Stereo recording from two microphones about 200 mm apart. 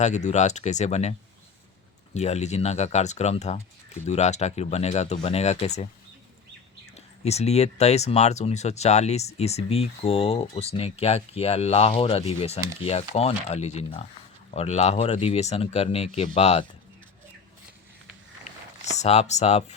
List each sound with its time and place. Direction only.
0.0 s speech: 35° left (ahead or behind)
2.1 s speech: 35° left (ahead or behind)
6.9 s speech: 30° left (ahead or behind)
18.9 s speech: 30° left (ahead or behind)